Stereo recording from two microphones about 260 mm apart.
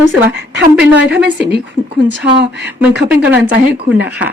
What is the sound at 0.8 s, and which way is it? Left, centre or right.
Speech, centre.